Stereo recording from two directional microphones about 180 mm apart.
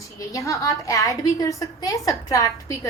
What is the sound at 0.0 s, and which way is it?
A woman's voice, 15° left (ahead or behind).